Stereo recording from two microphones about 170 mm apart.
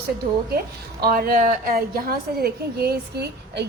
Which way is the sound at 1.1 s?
60° right (ahead or behind).